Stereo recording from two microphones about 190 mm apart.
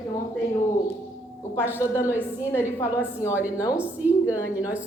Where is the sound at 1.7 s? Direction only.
15° left (ahead or behind).